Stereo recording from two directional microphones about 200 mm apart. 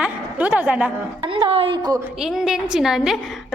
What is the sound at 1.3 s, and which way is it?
Speech, 25° right (ahead or behind).